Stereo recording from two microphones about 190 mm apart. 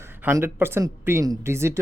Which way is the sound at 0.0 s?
10° right (ahead or behind).